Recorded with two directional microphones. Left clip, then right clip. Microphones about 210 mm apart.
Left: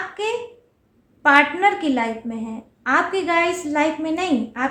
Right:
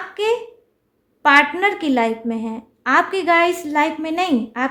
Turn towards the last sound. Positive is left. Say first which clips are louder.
# right 2 dB
turn(degrees=-45)  # may be behind; listen again after turning